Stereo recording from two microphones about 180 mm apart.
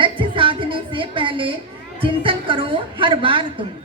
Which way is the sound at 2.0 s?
30° right (ahead or behind).